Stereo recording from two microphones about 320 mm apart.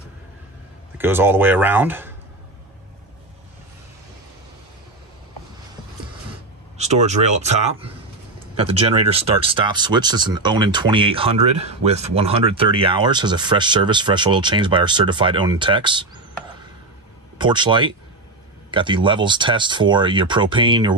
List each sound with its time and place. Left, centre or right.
0.9 s speech: centre
6.8 s speech: right
17.4 s speech: centre